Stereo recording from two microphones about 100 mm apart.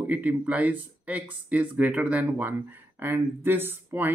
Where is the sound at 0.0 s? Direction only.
15° right (ahead or behind).